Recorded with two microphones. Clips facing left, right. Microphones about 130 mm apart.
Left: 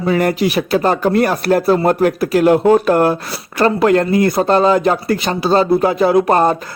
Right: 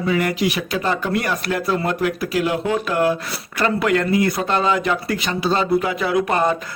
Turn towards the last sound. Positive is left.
turn(degrees=40)  # may be behind; listen again after turning